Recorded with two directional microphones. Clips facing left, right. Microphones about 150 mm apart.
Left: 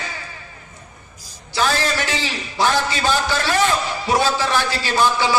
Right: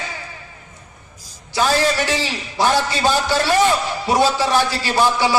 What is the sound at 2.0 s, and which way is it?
Speech, 15° right (ahead or behind).